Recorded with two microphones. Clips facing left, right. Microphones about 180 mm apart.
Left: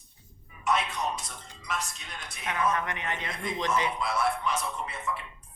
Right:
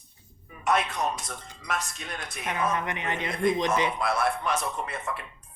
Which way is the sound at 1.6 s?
55° right (ahead or behind).